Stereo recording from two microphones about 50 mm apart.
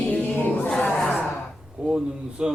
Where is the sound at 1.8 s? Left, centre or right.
Right.